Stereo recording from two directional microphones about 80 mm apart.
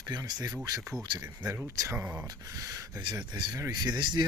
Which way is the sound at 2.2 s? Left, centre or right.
Right.